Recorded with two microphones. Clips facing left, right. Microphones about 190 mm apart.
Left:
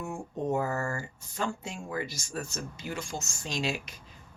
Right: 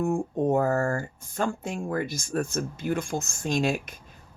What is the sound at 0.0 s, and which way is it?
Speech, 50° right (ahead or behind).